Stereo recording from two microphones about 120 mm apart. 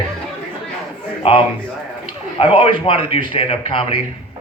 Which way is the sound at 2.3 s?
50° left (ahead or behind).